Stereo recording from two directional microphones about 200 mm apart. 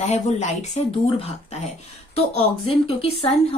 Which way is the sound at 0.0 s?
35° left (ahead or behind).